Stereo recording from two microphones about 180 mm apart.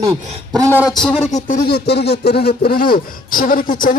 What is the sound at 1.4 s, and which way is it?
Speech, 55° left (ahead or behind).